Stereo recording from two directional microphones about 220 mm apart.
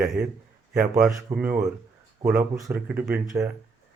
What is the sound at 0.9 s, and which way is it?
Speech, 15° right (ahead or behind).